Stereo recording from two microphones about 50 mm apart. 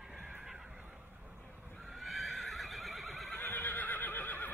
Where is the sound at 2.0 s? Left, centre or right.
Centre.